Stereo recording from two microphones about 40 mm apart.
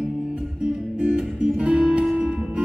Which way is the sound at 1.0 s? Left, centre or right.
Right.